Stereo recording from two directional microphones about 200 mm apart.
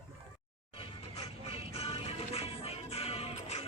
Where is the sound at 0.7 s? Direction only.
25° left (ahead or behind).